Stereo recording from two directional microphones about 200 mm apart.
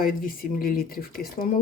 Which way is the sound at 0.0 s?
45° left (ahead or behind).